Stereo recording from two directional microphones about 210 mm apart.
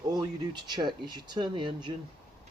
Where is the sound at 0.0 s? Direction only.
20° right (ahead or behind).